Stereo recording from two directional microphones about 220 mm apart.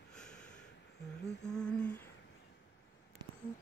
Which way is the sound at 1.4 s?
5° left (ahead or behind).